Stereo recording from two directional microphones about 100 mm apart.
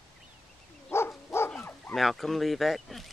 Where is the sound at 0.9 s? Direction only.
25° left (ahead or behind).